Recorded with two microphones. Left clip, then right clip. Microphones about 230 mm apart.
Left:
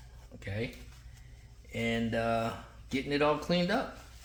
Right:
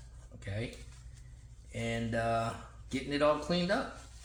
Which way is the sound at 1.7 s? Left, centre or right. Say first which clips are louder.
Left 3 dB; left.